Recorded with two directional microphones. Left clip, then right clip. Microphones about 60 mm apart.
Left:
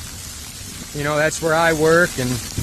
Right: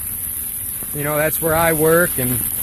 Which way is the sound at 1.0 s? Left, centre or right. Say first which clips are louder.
Left 1 dB; centre.